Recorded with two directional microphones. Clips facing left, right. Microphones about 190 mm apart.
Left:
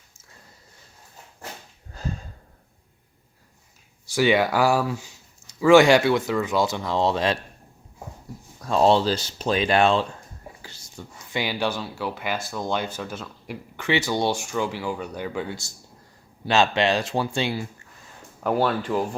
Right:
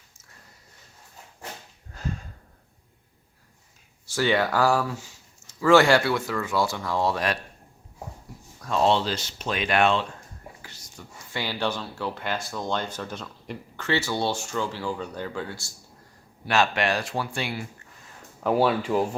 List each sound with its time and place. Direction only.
2.0 s a sound: 35° left (ahead or behind)
4.0 s speech: 15° left (ahead or behind)
8.6 s speech: 35° left (ahead or behind)
10.6 s a sound: 30° left (ahead or behind)
11.3 s speech: 15° left (ahead or behind)
18.3 s speech: 5° right (ahead or behind)